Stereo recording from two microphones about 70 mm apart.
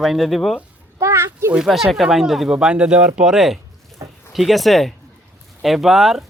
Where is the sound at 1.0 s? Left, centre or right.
Right.